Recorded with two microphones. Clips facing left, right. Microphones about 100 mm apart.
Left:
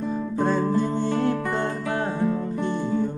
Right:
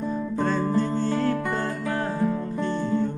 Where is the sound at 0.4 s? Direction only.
15° left (ahead or behind).